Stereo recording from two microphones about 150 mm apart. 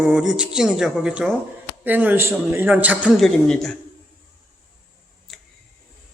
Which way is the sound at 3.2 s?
5° left (ahead or behind).